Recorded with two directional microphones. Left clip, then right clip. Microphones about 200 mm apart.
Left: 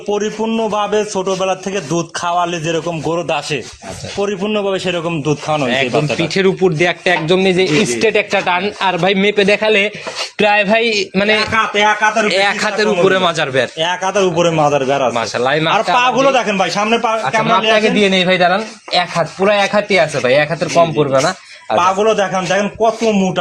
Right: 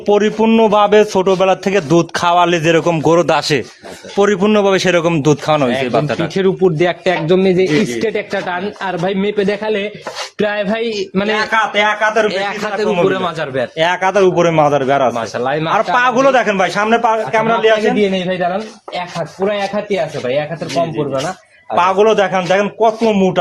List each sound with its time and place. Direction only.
0.1 s a man's voice: 45° right (ahead or behind)
5.6 s a man's voice: 5° right (ahead or behind); by 7.7 s 30° right (ahead or behind)
7.9 s a man's voice: 15° right (ahead or behind)
12.3 s a man's voice: 10° left (ahead or behind)
13.7 s a man's voice: 45° right (ahead or behind); by 15.1 s 25° right (ahead or behind)
15.1 s a man's voice: 5° left (ahead or behind); by 17.0 s 15° right (ahead or behind)
18.1 s a man's voice: 30° left (ahead or behind)
21.8 s a man's voice: 35° right (ahead or behind)